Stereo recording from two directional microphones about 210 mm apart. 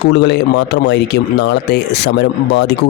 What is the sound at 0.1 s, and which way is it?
Speech, 55° left (ahead or behind).